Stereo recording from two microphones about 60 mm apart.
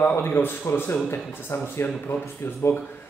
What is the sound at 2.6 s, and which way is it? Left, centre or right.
Speech, left.